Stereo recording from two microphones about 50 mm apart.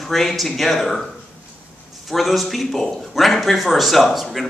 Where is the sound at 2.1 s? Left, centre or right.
Centre.